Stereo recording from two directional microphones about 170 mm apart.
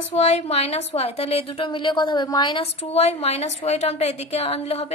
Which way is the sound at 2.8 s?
40° left (ahead or behind).